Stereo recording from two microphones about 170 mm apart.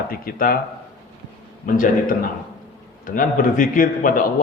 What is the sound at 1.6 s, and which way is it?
Speech, 55° left (ahead or behind).